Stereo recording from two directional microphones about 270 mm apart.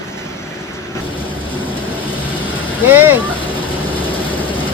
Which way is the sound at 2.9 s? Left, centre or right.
Centre.